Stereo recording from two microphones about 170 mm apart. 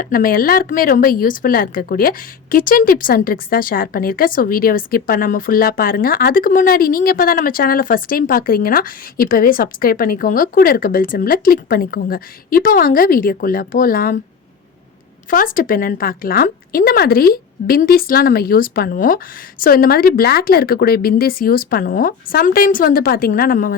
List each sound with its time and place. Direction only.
0.0 s a woman's voice: 55° left (ahead or behind)
15.3 s a woman's voice: 55° left (ahead or behind)